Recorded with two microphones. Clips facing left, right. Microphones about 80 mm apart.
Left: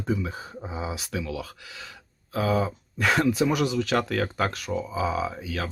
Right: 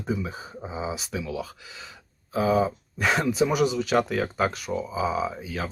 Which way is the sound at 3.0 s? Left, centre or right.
Centre.